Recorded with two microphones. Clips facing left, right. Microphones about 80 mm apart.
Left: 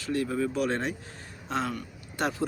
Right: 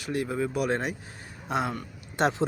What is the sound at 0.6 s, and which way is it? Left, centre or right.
Speech, centre.